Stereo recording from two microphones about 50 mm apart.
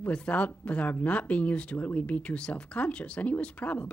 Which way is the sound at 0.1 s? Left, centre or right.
Left.